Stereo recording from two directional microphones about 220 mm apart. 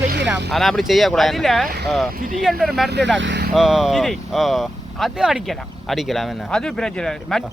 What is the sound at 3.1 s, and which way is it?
Speech, 55° right (ahead or behind).